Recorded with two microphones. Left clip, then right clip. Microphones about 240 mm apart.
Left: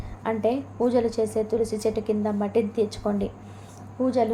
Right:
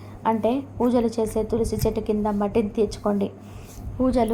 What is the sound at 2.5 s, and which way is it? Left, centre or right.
Speech, centre.